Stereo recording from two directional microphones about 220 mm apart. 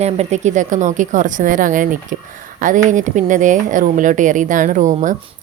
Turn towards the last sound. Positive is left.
turn(degrees=-35)  # may be behind; listen again after turning